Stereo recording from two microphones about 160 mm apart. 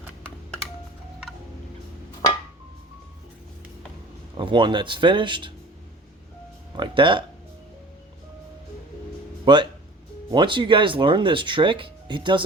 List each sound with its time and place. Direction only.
4.4 s speech: 30° right (ahead or behind)
6.7 s speech: 30° right (ahead or behind)
9.4 s speech: 30° right (ahead or behind)